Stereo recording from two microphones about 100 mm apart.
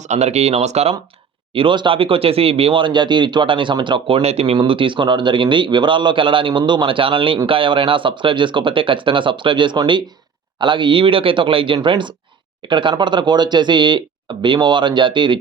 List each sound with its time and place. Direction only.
0.3 s speech: 90° right
1.5 s speech: 55° right (ahead or behind)